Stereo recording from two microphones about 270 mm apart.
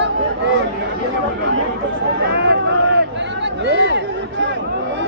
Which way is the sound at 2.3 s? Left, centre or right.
Right.